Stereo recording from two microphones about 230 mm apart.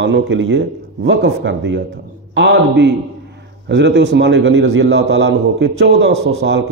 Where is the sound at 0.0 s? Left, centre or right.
Right.